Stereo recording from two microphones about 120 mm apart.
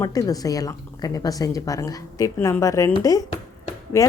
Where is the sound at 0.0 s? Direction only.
30° left (ahead or behind).